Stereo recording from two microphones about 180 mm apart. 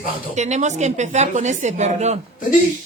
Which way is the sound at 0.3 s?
40° right (ahead or behind).